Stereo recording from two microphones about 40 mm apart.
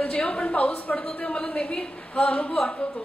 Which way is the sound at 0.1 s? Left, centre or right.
Left.